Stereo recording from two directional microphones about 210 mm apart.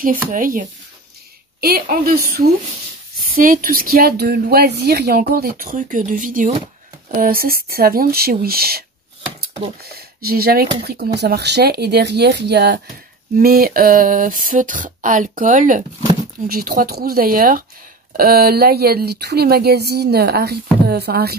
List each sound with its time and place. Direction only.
0.3 s speech: 40° right (ahead or behind)
9.8 s speech: 45° right (ahead or behind)